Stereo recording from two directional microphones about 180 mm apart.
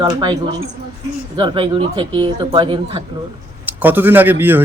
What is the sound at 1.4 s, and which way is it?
Speech, 30° right (ahead or behind).